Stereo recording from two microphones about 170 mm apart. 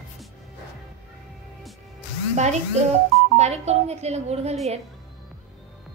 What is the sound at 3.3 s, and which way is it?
Speech, 40° right (ahead or behind).